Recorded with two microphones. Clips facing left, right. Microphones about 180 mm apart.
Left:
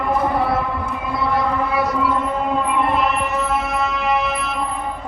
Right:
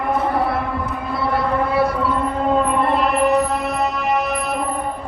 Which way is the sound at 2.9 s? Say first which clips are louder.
Right 4 dB; 35° right (ahead or behind).